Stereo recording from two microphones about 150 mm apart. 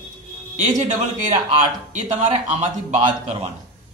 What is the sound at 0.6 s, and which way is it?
A man's voice, 55° right (ahead or behind).